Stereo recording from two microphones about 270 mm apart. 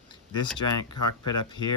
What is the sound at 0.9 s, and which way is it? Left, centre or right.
Speech, left.